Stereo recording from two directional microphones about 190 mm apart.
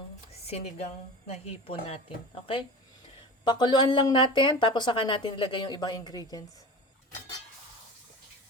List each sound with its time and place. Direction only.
0.4 s a woman's voice: 35° left (ahead or behind)